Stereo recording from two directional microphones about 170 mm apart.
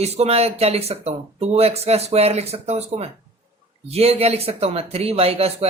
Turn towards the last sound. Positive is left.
turn(degrees=-35)  # may be behind; listen again after turning